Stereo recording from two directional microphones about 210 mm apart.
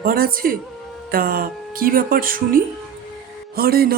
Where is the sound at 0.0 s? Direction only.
45° right (ahead or behind).